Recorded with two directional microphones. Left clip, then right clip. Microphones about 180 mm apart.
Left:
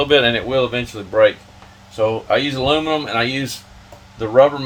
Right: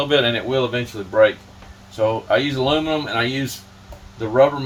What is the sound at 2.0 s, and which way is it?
Speech, 40° left (ahead or behind).